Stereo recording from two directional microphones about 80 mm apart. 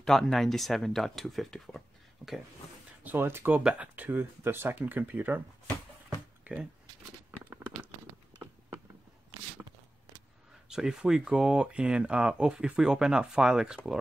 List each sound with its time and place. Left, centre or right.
0.0 s speech: centre
3.0 s speech: right
6.0 s a sound: centre
10.7 s speech: centre